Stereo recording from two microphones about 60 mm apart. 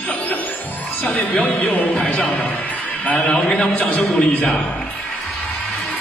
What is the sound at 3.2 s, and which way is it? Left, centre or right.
Speech, centre.